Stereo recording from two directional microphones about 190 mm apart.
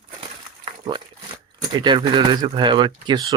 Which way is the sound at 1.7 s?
25° right (ahead or behind).